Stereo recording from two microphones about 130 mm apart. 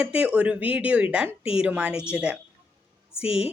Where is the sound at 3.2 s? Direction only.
50° left (ahead or behind).